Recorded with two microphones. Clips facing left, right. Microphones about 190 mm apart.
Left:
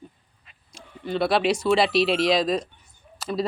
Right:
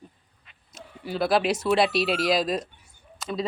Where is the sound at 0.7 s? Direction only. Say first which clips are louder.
Left 2 dB; 5° right (ahead or behind).